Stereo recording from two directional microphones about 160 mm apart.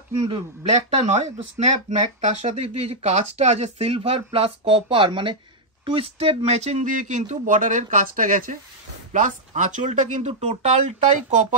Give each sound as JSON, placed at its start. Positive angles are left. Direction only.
{"t": 1.0, "sound": "speech", "side_deg": -45}